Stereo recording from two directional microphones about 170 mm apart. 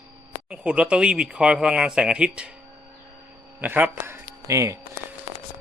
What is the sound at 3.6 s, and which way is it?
Speech, 10° right (ahead or behind).